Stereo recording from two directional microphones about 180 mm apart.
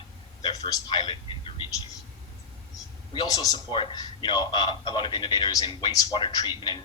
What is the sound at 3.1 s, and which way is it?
A man's voice, 25° left (ahead or behind).